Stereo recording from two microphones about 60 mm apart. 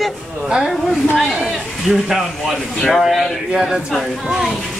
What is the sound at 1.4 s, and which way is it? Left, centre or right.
Speech, centre.